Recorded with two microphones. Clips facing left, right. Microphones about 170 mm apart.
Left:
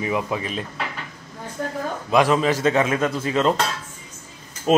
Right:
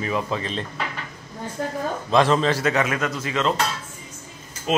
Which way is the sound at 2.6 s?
25° left (ahead or behind).